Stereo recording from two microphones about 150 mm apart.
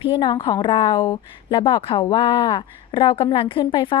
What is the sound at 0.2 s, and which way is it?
A woman's voice, 30° left (ahead or behind).